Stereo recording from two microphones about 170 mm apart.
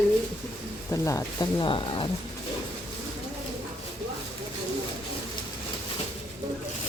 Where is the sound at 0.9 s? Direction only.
20° left (ahead or behind).